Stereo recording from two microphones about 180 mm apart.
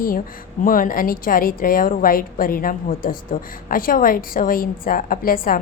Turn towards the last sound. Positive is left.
turn(degrees=50)  # may be behind; listen again after turning